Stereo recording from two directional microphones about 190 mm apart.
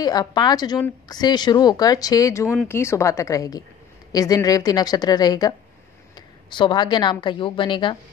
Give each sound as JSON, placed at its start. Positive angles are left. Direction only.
{"t": 0.0, "sound": "a woman's voice", "side_deg": 20}
{"t": 2.4, "sound": "speech", "side_deg": -5}
{"t": 2.7, "sound": "a woman's voice", "side_deg": 15}